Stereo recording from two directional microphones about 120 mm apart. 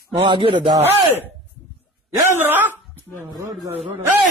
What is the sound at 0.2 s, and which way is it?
Speech, 45° right (ahead or behind).